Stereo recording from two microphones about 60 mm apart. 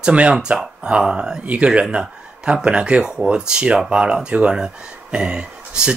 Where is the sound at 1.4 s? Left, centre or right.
Right.